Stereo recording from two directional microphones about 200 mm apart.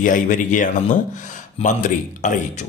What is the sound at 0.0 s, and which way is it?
A man's voice, 40° left (ahead or behind).